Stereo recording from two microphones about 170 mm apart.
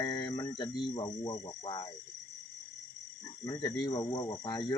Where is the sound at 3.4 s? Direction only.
25° left (ahead or behind).